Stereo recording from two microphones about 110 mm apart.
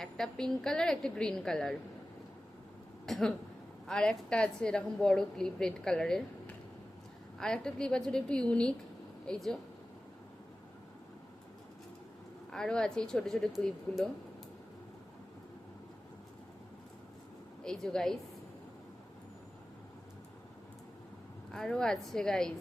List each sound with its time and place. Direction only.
0.0 s a woman's voice: 5° left (ahead or behind)
3.1 s a woman's voice: 5° left (ahead or behind)
7.3 s a woman's voice: 5° left (ahead or behind)
12.5 s a woman's voice: 5° left (ahead or behind)
17.6 s a woman's voice: 5° left (ahead or behind)
21.5 s a woman's voice: 5° left (ahead or behind)